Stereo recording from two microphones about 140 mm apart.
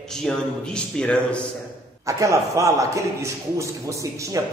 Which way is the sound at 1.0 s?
5° left (ahead or behind).